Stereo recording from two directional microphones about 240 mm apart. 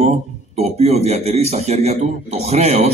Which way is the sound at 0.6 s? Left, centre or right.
Right.